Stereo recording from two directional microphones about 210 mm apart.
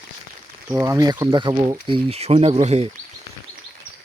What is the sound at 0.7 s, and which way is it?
Speech, 15° right (ahead or behind).